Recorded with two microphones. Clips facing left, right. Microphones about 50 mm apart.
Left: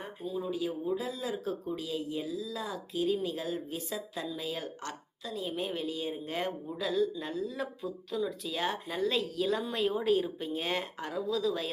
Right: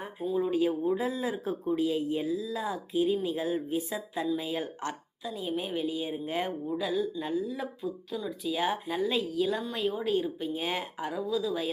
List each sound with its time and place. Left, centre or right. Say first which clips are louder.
0.2 s speech: right 7 dB; right
5.2 s a woman's voice: right 2 dB; centre